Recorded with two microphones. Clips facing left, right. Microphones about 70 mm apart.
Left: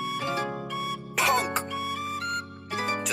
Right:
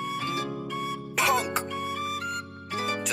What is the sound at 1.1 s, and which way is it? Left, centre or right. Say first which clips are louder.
Music: even; centre.